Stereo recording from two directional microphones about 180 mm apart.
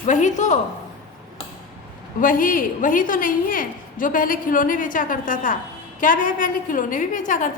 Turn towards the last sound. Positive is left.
turn(degrees=45)  # may be behind; listen again after turning